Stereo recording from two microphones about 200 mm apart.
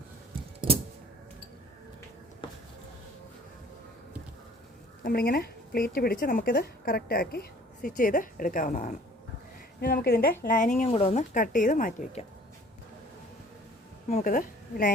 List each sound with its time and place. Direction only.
5.0 s speech: 50° left (ahead or behind)
14.1 s a woman's voice: 40° left (ahead or behind)